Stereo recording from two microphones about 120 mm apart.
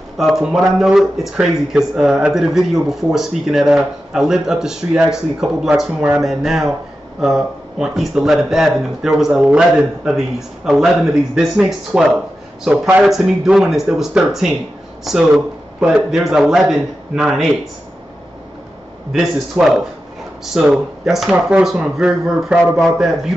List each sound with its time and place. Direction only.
0.2 s speech: 5° right (ahead or behind)
19.1 s speech: 5° right (ahead or behind)